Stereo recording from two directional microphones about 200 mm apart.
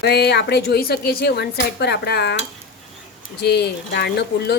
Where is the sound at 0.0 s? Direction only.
55° left (ahead or behind).